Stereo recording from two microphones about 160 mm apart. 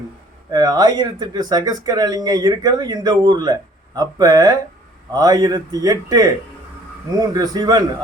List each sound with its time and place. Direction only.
0.5 s speech: 25° right (ahead or behind)